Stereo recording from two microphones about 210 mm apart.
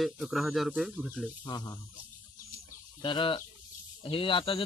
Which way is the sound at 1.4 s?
20° left (ahead or behind).